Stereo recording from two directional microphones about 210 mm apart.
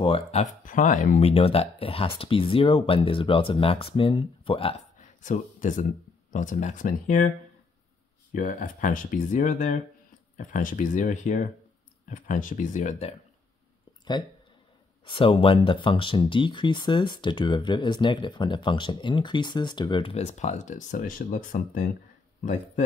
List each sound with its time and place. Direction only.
0.0 s speech: 30° left (ahead or behind)
8.3 s speech: 40° left (ahead or behind)
15.0 s speech: 25° left (ahead or behind)